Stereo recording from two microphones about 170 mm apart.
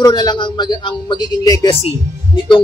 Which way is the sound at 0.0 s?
25° left (ahead or behind).